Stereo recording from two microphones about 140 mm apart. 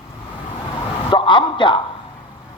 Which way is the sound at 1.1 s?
35° left (ahead or behind).